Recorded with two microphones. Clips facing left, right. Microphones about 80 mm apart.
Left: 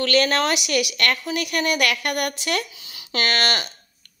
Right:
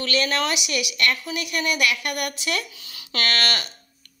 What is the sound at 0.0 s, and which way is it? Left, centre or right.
A woman's voice, left.